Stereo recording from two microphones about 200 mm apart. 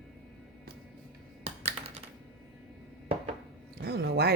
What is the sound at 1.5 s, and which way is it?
Computer keyboard, 30° right (ahead or behind).